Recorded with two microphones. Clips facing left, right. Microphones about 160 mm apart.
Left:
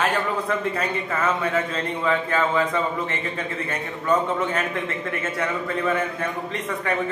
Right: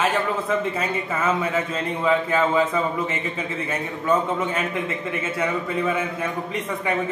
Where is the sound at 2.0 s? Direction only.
10° right (ahead or behind).